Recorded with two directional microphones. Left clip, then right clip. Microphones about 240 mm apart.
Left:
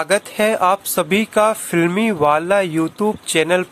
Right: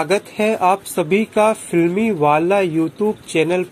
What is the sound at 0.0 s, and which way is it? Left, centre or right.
Speech, left.